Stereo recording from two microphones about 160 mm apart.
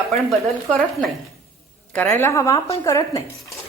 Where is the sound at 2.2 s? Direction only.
15° left (ahead or behind).